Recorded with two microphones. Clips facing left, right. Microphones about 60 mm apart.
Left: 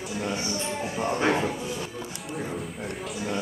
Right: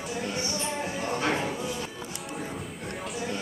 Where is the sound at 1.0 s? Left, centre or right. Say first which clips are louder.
Left 5 dB; left.